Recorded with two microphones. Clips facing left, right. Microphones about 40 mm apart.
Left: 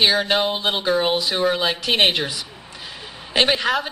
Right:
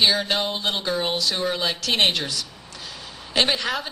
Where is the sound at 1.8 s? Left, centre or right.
Centre.